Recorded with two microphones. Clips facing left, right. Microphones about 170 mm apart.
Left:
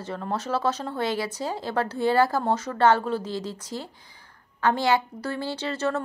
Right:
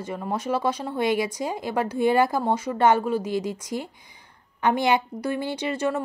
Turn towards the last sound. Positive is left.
turn(degrees=-15)  # may be behind; listen again after turning